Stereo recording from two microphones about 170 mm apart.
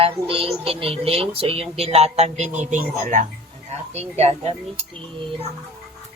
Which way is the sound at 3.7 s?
40° right (ahead or behind).